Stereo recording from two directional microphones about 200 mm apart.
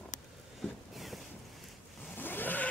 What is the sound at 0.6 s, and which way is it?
Vehicle, centre (ahead or behind).